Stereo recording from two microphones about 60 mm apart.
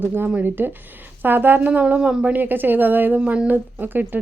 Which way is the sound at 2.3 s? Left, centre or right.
Right.